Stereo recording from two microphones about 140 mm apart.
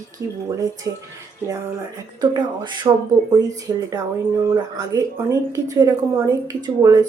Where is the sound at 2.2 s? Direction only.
30° right (ahead or behind).